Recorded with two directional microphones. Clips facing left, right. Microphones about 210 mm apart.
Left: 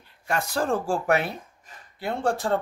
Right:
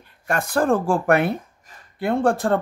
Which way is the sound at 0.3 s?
55° right (ahead or behind).